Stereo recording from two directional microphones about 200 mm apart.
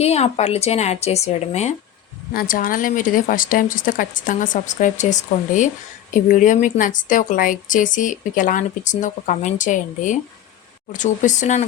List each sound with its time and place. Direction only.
0.0 s a woman's voice: 30° left (ahead or behind)
2.3 s a woman's voice: 45° left (ahead or behind)